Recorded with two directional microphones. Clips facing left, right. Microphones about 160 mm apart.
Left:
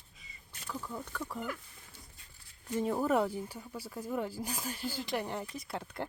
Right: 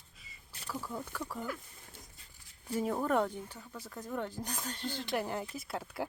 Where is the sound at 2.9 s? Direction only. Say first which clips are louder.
Left 2 dB; 5° left (ahead or behind).